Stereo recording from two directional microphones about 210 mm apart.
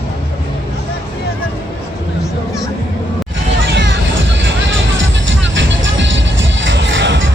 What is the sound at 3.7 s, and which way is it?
Music, 60° right (ahead or behind).